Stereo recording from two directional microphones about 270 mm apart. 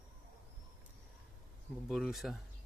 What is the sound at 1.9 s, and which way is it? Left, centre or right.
Speech, centre.